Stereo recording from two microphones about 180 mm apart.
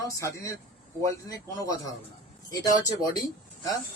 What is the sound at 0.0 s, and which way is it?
Speech, 15° left (ahead or behind).